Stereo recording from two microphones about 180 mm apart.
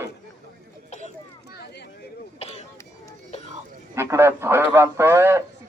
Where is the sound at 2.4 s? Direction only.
35° left (ahead or behind).